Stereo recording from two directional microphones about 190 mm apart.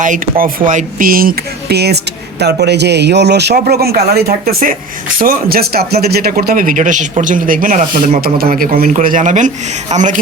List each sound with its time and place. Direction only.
0.0 s a man's voice: 45° right (ahead or behind)